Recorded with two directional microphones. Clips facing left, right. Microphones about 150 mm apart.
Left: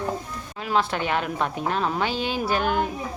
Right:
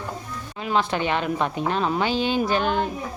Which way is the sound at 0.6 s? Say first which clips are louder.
Right 1 dB; centre (ahead or behind).